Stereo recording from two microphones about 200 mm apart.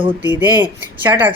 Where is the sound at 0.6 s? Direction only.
10° right (ahead or behind).